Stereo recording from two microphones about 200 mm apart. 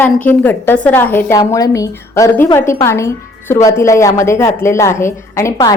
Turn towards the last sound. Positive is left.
turn(degrees=15)  # may be behind; listen again after turning